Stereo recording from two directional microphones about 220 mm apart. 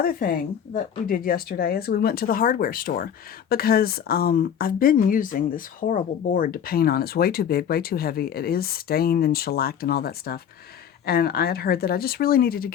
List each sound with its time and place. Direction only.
0.0 s a woman's voice: 40° left (ahead or behind)